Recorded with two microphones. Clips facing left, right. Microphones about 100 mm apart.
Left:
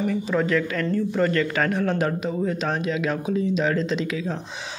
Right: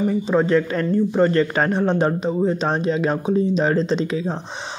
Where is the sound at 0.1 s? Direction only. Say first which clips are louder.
Right 5 dB; 30° right (ahead or behind).